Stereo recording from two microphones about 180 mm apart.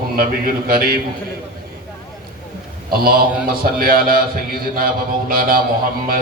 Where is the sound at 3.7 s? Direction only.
55° right (ahead or behind).